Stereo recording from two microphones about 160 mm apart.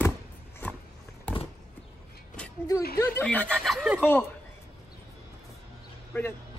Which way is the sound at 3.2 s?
5° left (ahead or behind).